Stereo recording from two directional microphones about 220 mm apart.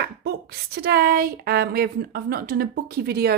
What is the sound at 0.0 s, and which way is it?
Speech, 45° right (ahead or behind).